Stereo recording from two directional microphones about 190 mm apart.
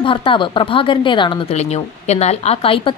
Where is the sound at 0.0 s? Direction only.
25° left (ahead or behind).